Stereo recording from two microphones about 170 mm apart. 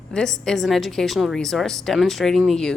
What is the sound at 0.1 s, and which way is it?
A woman's voice, 5° left (ahead or behind).